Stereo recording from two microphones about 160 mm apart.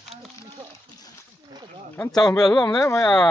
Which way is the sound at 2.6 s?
20° left (ahead or behind).